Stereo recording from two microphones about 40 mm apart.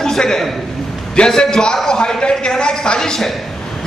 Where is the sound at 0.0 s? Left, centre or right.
Centre.